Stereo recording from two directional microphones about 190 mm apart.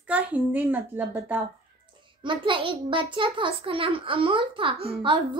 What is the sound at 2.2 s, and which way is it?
A child's voice, 25° right (ahead or behind).